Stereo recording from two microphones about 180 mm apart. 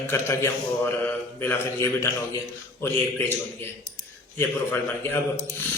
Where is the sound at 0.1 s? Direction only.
15° left (ahead or behind).